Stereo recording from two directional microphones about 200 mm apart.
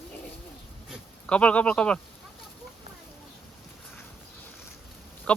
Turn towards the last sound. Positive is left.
turn(degrees=5)  # may be behind; listen again after turning